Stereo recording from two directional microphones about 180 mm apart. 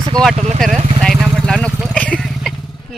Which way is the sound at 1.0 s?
Centre (ahead or behind).